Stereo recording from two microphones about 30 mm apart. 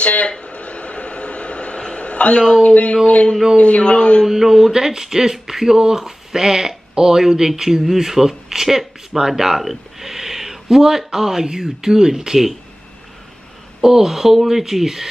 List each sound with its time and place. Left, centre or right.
0.0 s a sound: left
2.6 s a man's voice: left
4.3 s speech: centre
13.8 s speech: centre